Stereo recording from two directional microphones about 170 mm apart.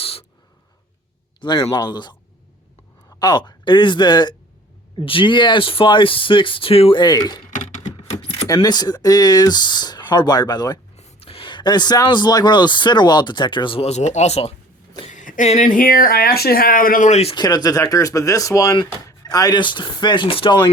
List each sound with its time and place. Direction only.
0.0 s a sound: 35° left (ahead or behind)
1.4 s speech: 30° left (ahead or behind)
3.2 s speech: 25° left (ahead or behind)
7.5 s a sound: 45° left (ahead or behind)
8.4 s speech: 20° left (ahead or behind)
10.9 s speech: 35° left (ahead or behind)
17.3 s speech: 25° left (ahead or behind)